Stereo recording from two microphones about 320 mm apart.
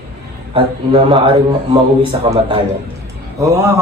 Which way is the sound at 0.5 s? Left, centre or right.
Centre.